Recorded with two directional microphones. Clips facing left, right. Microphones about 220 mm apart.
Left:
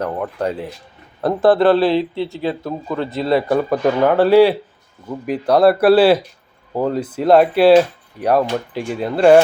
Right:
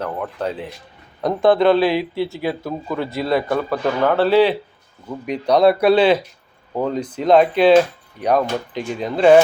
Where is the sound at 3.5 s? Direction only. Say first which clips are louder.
Left 4 dB; 15° left (ahead or behind).